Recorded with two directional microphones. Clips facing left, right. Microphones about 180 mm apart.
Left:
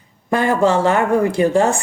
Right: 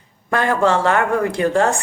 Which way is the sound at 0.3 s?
20° left (ahead or behind).